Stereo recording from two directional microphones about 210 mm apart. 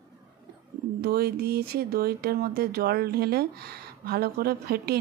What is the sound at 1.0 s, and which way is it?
Speech, 45° right (ahead or behind).